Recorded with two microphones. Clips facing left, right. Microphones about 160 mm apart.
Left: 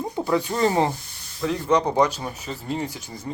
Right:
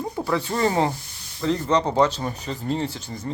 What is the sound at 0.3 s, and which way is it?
Speech, 20° left (ahead or behind).